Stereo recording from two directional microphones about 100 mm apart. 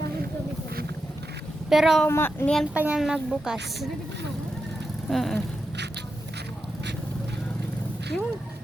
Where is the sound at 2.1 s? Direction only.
20° left (ahead or behind).